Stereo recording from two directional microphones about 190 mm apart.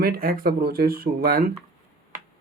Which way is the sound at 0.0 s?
50° right (ahead or behind).